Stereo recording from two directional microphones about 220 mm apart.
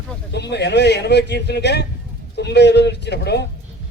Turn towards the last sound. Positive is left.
turn(degrees=50)  # may be behind; listen again after turning